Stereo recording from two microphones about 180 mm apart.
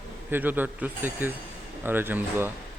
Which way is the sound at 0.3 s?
10° right (ahead or behind).